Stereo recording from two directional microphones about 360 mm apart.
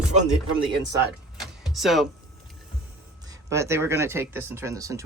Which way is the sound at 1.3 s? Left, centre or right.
Centre.